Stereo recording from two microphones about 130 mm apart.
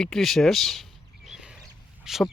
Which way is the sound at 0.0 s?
Centre (ahead or behind).